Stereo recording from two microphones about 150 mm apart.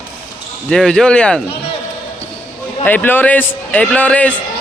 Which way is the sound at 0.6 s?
5° left (ahead or behind).